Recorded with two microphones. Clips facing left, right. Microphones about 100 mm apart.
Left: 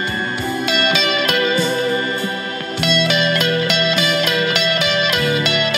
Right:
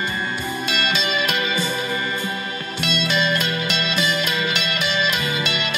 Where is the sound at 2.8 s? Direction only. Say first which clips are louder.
Left 5 dB; 65° left (ahead or behind).